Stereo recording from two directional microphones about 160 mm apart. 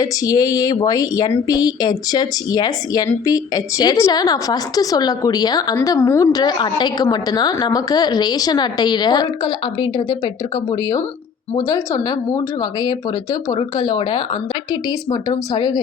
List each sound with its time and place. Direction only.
0.0 s speech: 25° left (ahead or behind)
13.5 s speech: 25° left (ahead or behind)